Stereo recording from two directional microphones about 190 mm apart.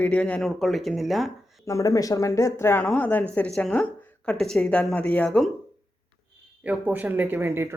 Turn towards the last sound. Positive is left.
turn(degrees=-15)  # may be behind; listen again after turning